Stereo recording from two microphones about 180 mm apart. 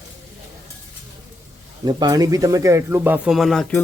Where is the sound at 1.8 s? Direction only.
20° right (ahead or behind).